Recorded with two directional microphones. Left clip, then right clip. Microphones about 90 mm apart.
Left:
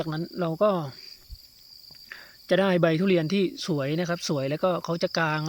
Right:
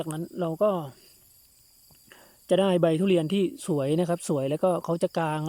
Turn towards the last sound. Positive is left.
turn(degrees=-30)  # may be behind; listen again after turning